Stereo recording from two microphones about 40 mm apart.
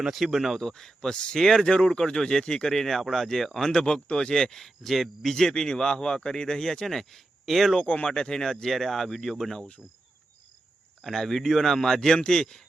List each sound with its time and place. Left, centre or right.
0.0 s speech: centre
0.6 s speech: centre
1.6 s cricket: left
1.9 s speech: centre
7.8 s speech: left
8.0 s speech: centre
9.6 s cricket: left
11.0 s speech: centre